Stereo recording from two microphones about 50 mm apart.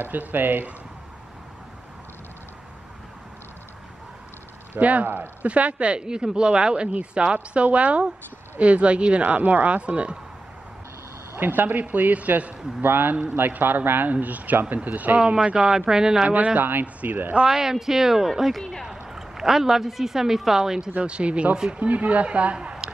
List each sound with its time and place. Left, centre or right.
0.0 s a man's voice: right
4.7 s a man's voice: right
5.0 s a man's voice: right
5.5 s speech: right
11.3 s a man's voice: right
12.8 s a man's voice: right
15.1 s speech: centre
16.3 s a man's voice: right
17.5 s speech: centre
18.6 s speech: centre
18.9 s speech: centre
20.9 s speech: right